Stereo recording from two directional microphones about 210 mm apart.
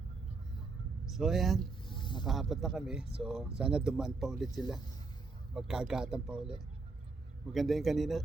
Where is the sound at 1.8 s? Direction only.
20° left (ahead or behind).